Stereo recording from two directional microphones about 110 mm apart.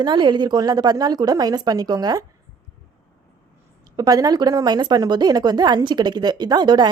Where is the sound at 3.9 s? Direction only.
35° right (ahead or behind).